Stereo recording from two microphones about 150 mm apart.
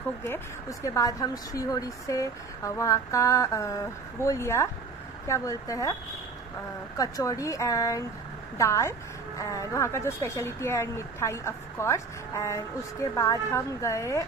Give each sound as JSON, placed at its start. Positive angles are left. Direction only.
{"t": 0.2, "sound": "a woman's voice", "side_deg": 20}
{"t": 7.0, "sound": "a woman's voice", "side_deg": 25}